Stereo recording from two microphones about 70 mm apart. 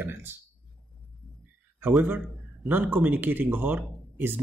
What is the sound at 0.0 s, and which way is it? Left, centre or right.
Speech, right.